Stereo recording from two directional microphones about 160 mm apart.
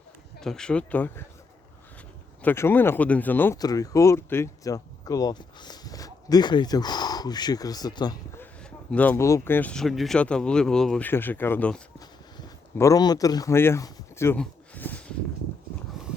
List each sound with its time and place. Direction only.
0.3 s speech: 5° left (ahead or behind)
2.4 s speech: 15° left (ahead or behind)
8.4 s speech: 5° left (ahead or behind)
11.9 s a sound: 20° left (ahead or behind)